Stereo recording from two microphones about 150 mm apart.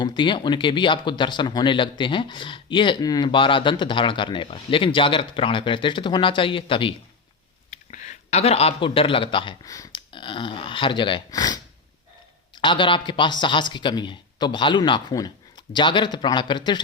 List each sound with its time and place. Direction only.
0.0 s speech: 30° left (ahead or behind)
7.7 s speech: 50° left (ahead or behind); by 9.6 s 35° left (ahead or behind)
9.6 s speech: 25° left (ahead or behind)
10.1 s speech: 35° left (ahead or behind)